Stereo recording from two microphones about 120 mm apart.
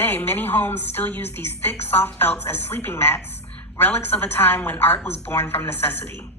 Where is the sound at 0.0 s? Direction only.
15° left (ahead or behind).